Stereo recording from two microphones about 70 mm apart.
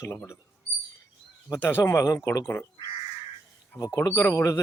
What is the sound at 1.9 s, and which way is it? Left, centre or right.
Speech, left.